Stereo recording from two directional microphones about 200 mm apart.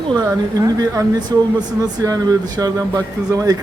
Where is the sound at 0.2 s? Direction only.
15° right (ahead or behind).